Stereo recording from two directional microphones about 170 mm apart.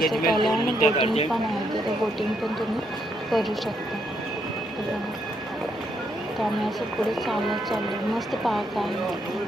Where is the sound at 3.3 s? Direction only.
Centre (ahead or behind).